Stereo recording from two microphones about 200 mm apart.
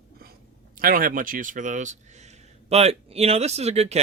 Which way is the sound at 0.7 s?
45° right (ahead or behind).